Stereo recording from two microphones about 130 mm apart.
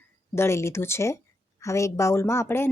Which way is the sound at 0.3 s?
20° left (ahead or behind).